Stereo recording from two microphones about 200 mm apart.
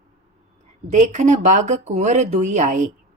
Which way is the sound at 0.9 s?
40° right (ahead or behind).